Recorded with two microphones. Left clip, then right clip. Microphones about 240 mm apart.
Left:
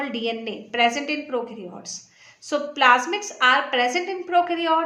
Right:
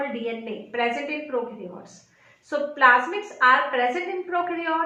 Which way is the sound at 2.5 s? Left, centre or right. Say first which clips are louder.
Even; left.